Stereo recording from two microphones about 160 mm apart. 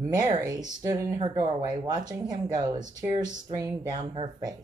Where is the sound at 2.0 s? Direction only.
55° right (ahead or behind).